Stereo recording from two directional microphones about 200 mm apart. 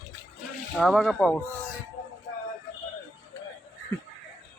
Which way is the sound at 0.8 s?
Centre (ahead or behind).